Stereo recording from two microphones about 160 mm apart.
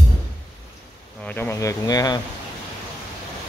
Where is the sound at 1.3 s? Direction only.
15° left (ahead or behind).